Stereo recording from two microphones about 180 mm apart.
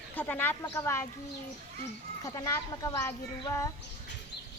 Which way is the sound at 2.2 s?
20° left (ahead or behind).